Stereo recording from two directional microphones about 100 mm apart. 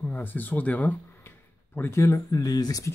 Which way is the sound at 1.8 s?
25° left (ahead or behind).